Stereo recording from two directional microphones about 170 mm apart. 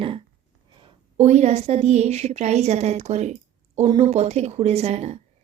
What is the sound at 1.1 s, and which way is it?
Speech, 40° right (ahead or behind).